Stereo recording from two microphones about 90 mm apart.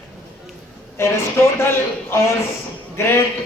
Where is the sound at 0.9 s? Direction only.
30° left (ahead or behind).